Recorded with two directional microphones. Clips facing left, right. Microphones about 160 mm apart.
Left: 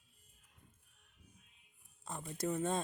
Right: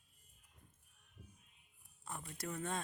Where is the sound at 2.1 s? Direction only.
20° left (ahead or behind).